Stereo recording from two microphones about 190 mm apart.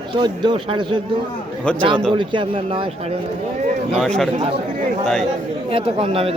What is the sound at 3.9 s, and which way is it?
Speech, centre (ahead or behind).